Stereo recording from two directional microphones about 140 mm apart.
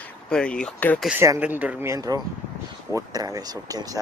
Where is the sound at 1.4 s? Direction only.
10° right (ahead or behind).